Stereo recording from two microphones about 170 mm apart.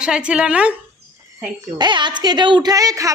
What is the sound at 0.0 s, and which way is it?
Speech, 5° right (ahead or behind).